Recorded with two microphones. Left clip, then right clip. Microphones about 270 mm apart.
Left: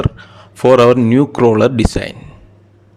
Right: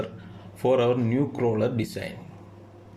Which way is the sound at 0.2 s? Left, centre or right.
Left.